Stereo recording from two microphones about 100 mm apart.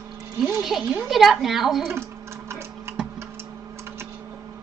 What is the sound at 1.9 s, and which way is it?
Typing, 25° right (ahead or behind).